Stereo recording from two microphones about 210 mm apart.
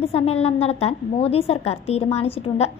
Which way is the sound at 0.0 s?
30° left (ahead or behind).